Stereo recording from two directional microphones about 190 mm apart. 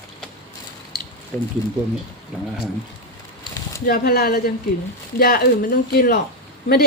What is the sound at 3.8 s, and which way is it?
A woman's voice, 50° left (ahead or behind).